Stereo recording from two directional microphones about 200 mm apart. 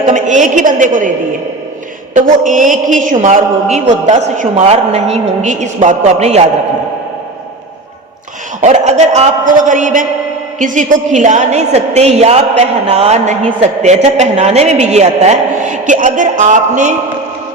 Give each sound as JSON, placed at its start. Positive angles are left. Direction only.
{"t": 0.0, "sound": "a man's voice", "side_deg": -40}
{"t": 2.1, "sound": "a man's voice", "side_deg": -40}
{"t": 8.6, "sound": "a man's voice", "side_deg": -35}